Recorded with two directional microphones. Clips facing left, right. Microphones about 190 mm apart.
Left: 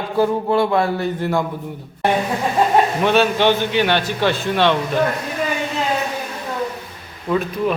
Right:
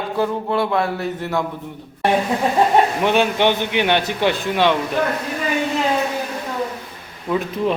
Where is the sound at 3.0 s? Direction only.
15° right (ahead or behind).